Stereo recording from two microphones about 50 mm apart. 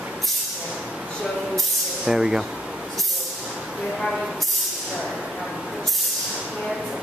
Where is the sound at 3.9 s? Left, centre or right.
Centre.